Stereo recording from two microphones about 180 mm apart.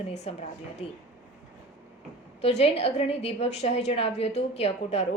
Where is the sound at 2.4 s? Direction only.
35° left (ahead or behind).